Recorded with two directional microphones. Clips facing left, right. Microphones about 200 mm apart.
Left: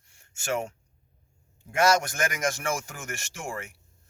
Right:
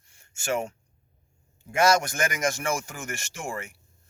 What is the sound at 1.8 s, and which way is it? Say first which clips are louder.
Speech: right 1 dB; centre (ahead or behind).